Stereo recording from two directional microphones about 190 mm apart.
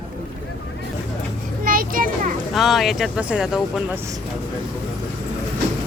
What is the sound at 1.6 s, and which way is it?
Children playing, 50° right (ahead or behind).